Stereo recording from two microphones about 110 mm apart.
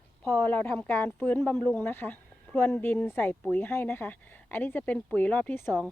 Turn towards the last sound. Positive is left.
turn(degrees=20)  # may be behind; listen again after turning